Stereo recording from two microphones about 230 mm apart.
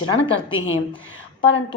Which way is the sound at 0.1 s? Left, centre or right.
Left.